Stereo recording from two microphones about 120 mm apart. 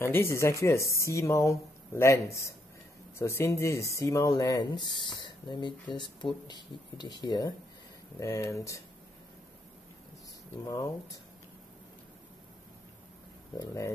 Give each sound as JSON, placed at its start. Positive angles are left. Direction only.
{"t": 0.0, "sound": "speech", "side_deg": 20}
{"t": 10.6, "sound": "speech", "side_deg": 30}
{"t": 13.6, "sound": "speech", "side_deg": 25}